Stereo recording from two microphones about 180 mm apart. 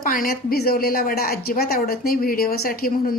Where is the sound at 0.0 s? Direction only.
50° left (ahead or behind).